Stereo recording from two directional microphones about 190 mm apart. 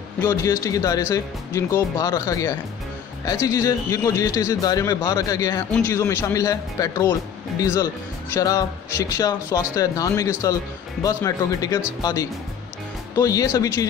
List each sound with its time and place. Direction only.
0.2 s speech: 15° left (ahead or behind)